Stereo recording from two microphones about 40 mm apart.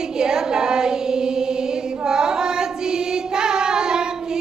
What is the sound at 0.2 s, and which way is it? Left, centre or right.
Choir, centre.